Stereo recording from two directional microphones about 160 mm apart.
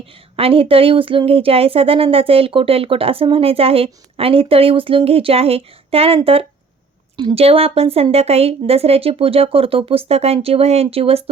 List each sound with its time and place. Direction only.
0.0 s speech: 35° right (ahead or behind)